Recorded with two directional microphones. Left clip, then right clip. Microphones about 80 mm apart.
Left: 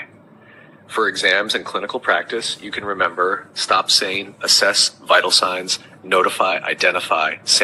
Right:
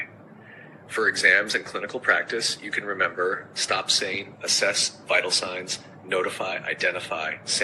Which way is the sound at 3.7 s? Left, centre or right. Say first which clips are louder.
Left 8 dB; left.